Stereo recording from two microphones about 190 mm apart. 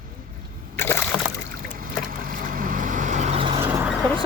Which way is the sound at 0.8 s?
10° left (ahead or behind).